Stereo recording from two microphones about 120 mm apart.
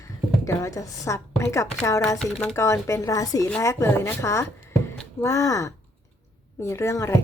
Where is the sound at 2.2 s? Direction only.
5° left (ahead or behind).